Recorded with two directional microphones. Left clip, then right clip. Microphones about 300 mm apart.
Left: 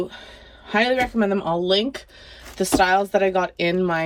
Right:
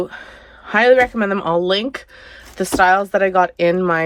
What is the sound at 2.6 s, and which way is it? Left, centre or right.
A man's voice, centre.